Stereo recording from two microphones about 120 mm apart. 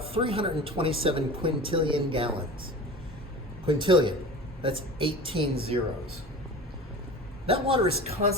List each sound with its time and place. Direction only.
0.0 s speech: 50° right (ahead or behind)
3.7 s speech: 45° right (ahead or behind)
7.4 s speech: 50° right (ahead or behind)